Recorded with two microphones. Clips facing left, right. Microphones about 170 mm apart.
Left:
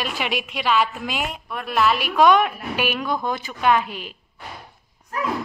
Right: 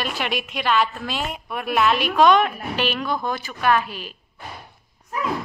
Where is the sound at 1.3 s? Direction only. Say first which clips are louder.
Right 1 dB; 5° right (ahead or behind); by 4.2 s 20° left (ahead or behind).